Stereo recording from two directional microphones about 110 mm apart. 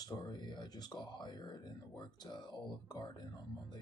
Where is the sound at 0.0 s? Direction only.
40° left (ahead or behind).